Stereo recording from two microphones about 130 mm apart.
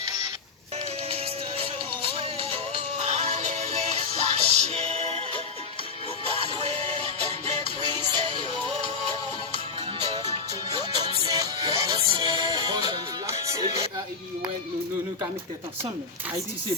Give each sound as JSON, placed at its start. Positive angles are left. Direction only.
{"t": 1.1, "sound": "music", "side_deg": -50}
{"t": 6.5, "sound": "music", "side_deg": -45}
{"t": 10.7, "sound": "music", "side_deg": -35}